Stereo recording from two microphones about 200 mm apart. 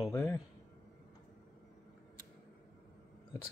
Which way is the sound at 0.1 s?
10° left (ahead or behind).